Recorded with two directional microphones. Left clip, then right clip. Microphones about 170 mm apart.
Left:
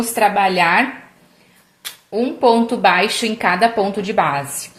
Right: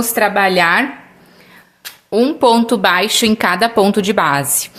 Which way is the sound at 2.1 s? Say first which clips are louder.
Right 3 dB; 40° right (ahead or behind).